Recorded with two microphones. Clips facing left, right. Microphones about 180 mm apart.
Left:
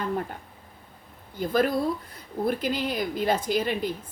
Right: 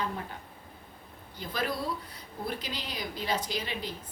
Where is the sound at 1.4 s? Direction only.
50° left (ahead or behind).